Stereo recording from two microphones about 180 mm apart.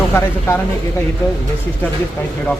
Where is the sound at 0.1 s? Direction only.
15° left (ahead or behind).